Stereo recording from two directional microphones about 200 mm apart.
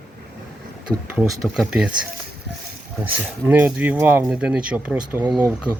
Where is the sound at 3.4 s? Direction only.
10° right (ahead or behind).